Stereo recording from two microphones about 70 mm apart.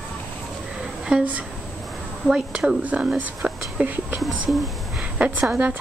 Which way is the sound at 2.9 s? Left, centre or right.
Right.